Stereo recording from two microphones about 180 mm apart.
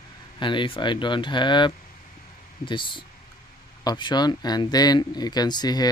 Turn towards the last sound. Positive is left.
turn(degrees=20)  # may be behind; listen again after turning